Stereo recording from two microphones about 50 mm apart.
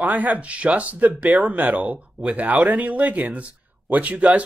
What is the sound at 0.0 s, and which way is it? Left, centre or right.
Speech, right.